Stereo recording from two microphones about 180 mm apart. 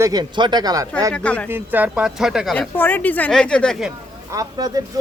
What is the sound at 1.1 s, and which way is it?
Speech, 5° left (ahead or behind).